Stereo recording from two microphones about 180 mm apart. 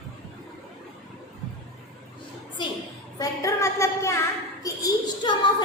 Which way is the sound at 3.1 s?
15° left (ahead or behind).